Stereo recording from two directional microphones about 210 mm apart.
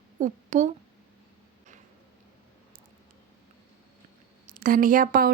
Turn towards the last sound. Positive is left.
turn(degrees=-45)  # may be behind; listen again after turning